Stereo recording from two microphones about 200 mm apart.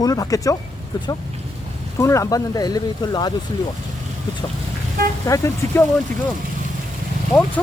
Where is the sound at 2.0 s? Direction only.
15° left (ahead or behind).